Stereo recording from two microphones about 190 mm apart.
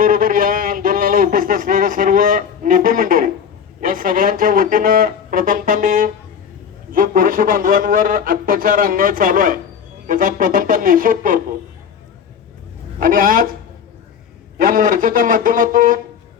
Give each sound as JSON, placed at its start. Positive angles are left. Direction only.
{"t": 0.0, "sound": "a sound", "side_deg": -45}
{"t": 3.8, "sound": "speech", "side_deg": -45}
{"t": 13.0, "sound": "speech", "side_deg": -45}
{"t": 14.6, "sound": "speech", "side_deg": -45}